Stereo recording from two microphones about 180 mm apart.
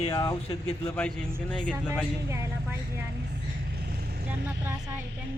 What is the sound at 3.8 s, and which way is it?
Vehicle, 60° right (ahead or behind).